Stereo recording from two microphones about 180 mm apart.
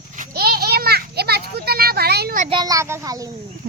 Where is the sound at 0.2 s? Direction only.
55° right (ahead or behind).